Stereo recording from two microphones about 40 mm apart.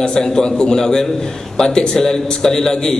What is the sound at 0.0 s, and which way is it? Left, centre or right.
A man's voice, centre.